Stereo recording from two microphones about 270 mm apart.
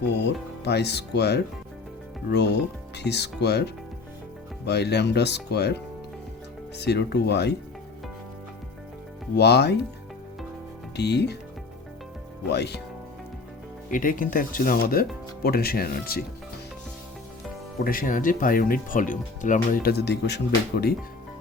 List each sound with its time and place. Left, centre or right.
0.6 s speech: left
9.3 s speech: left
10.9 s speech: left
12.5 s speech: left
13.9 s speech: left
17.8 s speech: left